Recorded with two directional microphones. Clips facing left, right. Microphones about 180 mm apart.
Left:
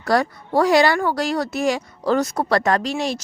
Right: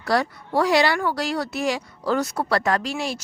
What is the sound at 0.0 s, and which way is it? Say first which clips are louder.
Speech: left 3 dB; 45° left (ahead or behind).